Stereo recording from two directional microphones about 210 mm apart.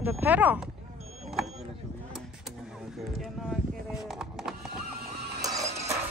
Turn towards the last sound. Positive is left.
turn(degrees=-30)  # may be behind; listen again after turning